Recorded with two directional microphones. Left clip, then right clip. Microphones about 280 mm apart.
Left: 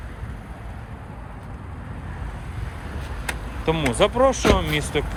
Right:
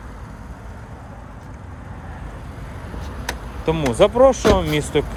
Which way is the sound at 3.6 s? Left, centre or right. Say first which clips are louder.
Right 4 dB; centre.